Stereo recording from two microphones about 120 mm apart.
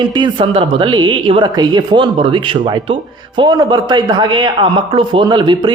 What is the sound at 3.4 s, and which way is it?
Speech, 35° right (ahead or behind).